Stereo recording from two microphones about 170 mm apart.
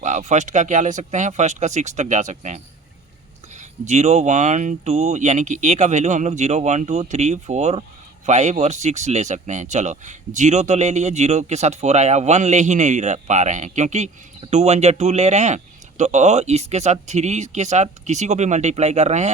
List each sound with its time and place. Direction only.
0.0 s speech: 45° right (ahead or behind)
3.6 s speech: 45° right (ahead or behind)